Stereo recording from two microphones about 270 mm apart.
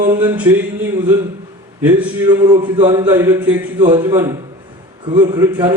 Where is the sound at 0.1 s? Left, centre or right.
Centre.